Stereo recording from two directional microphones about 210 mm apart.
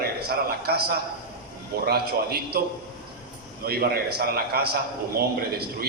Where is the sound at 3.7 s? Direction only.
45° right (ahead or behind).